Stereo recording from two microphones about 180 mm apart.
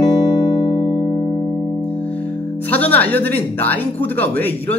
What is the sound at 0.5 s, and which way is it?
Music, 25° left (ahead or behind).